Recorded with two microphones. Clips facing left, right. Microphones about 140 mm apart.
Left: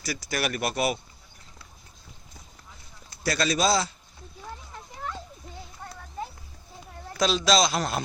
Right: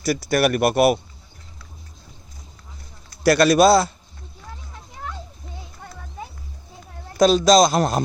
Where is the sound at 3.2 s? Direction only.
70° right (ahead or behind).